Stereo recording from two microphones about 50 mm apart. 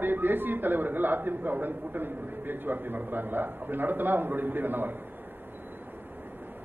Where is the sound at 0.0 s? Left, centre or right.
Right.